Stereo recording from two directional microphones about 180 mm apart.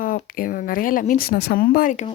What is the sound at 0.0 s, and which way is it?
Speech, 50° left (ahead or behind).